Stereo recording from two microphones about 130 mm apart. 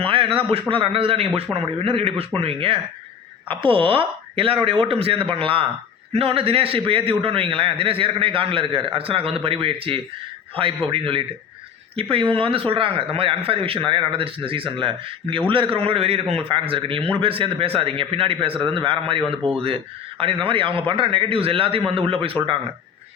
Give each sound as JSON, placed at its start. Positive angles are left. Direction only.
{"t": 0.0, "sound": "a man's voice", "side_deg": -45}